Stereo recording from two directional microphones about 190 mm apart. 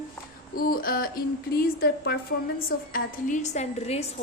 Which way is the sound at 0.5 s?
50° left (ahead or behind).